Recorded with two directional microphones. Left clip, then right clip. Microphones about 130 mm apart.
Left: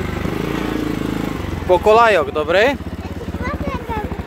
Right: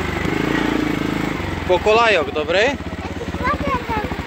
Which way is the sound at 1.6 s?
45° left (ahead or behind).